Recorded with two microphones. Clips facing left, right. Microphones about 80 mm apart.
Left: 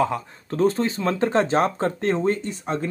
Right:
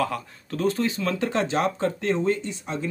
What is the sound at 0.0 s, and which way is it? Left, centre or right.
A man's voice, left.